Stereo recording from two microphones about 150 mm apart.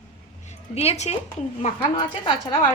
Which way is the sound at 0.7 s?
40° left (ahead or behind).